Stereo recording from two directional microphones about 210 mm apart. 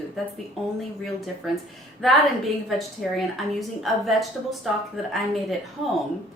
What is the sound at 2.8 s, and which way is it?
A woman's voice, centre (ahead or behind).